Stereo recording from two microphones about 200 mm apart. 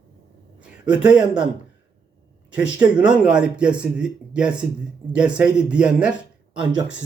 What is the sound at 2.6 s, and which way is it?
Speech, 5° right (ahead or behind).